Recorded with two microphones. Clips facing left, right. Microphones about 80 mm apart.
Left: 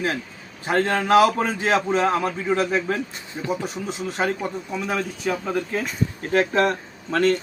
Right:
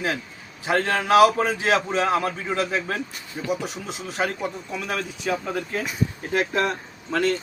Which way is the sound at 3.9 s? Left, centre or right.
Centre.